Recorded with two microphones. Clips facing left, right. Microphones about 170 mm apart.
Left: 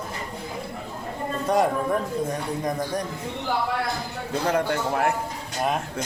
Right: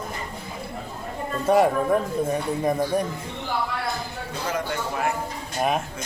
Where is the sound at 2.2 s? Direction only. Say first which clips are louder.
Right 4 dB; 10° right (ahead or behind).